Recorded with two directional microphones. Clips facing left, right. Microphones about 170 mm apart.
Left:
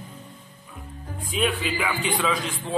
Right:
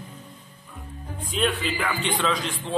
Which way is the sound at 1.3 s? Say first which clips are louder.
Even; 5° left (ahead or behind).